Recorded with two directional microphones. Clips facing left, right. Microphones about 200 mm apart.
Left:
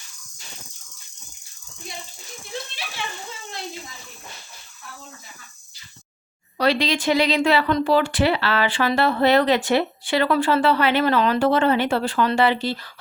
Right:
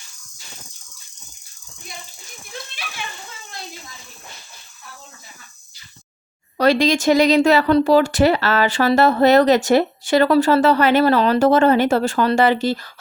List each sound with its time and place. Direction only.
6.6 s a woman's voice: 45° right (ahead or behind)